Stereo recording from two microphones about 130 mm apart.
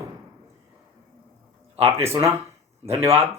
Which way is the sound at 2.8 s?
20° right (ahead or behind).